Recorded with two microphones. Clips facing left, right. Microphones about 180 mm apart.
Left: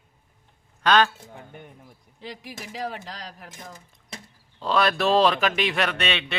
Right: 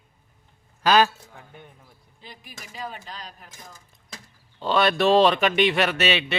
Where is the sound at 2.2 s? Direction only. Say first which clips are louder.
Left 7 dB; 85° left; by 3.8 s 65° left (ahead or behind).